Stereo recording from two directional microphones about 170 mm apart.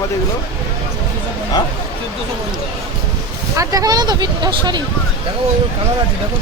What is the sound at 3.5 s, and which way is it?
Speech, 20° right (ahead or behind).